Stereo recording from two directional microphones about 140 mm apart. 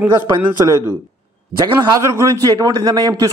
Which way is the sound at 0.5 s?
25° right (ahead or behind).